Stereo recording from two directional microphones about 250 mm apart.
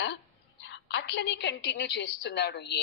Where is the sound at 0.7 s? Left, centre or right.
Left.